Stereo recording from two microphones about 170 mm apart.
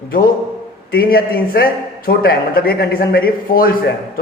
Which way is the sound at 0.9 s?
60° left (ahead or behind).